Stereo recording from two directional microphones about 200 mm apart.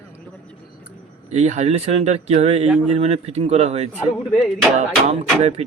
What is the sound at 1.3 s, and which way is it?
Speech, 35° right (ahead or behind).